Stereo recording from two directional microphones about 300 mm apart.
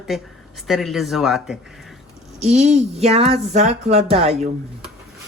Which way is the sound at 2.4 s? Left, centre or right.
Right.